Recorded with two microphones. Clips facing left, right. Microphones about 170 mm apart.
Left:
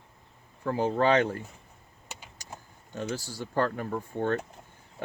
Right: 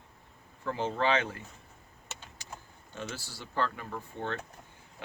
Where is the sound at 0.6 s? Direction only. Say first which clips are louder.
Left 5 dB; 40° left (ahead or behind).